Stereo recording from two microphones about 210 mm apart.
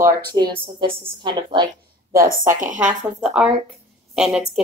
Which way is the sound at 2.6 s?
35° right (ahead or behind).